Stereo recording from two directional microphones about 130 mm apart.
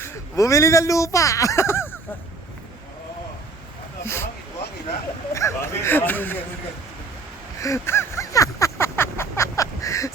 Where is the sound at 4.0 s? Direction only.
20° left (ahead or behind).